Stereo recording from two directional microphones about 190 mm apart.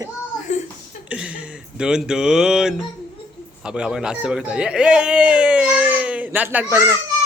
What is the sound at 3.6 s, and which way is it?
Speech, 5° right (ahead or behind).